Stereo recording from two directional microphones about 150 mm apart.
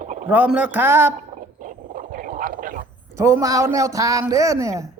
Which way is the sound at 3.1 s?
20° right (ahead or behind).